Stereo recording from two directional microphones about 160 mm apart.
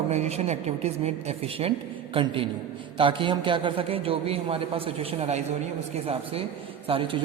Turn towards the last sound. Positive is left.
turn(degrees=-35)  # may be behind; listen again after turning